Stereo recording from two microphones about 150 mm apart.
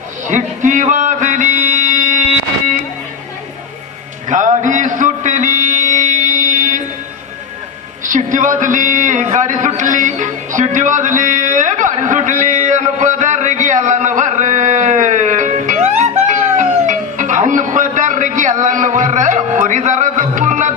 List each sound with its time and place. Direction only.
0.3 s music: 55° right (ahead or behind)
4.3 s music: 55° right (ahead or behind)
8.0 s a sound: 55° right (ahead or behind)